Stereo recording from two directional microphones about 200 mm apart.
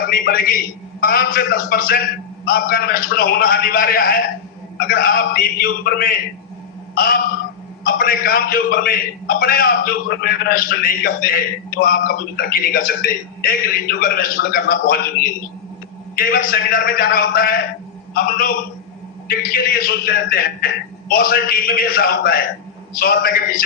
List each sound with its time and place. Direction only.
0.1 s a man's voice: 45° left (ahead or behind)
6.9 s a sound: 45° left (ahead or behind)
7.9 s a man's voice: 45° left (ahead or behind)